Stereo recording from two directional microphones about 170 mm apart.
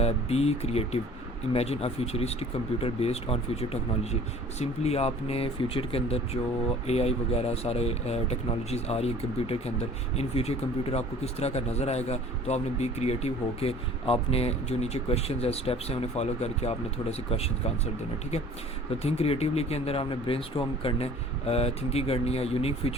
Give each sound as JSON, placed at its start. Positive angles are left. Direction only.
{"t": 0.0, "sound": "speech", "side_deg": 40}
{"t": 19.0, "sound": "speech", "side_deg": 35}